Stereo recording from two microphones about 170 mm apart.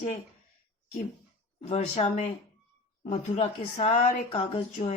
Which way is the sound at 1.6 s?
40° left (ahead or behind).